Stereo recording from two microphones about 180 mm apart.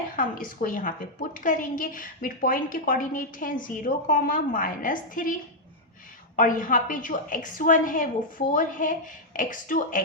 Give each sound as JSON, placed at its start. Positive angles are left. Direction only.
{"t": 0.2, "sound": "a woman's voice", "side_deg": 50}